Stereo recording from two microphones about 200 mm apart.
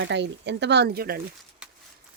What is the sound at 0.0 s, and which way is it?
Speech, 60° right (ahead or behind).